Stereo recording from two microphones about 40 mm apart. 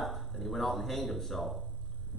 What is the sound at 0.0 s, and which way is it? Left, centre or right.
A man's voice, centre.